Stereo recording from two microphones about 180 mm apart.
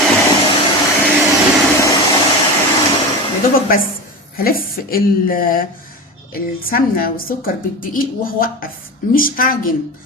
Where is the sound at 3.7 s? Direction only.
55° left (ahead or behind).